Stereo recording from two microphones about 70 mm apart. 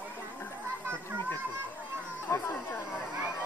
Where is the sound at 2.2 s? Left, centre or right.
Left.